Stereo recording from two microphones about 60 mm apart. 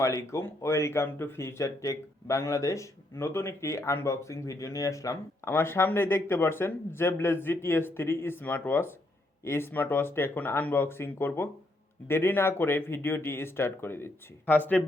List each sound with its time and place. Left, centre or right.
0.0 s speech: left
5.5 s speech: left